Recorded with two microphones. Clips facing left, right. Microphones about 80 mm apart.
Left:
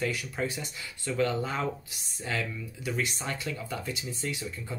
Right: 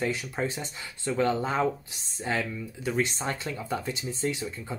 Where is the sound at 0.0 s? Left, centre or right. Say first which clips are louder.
Right 2 dB; right.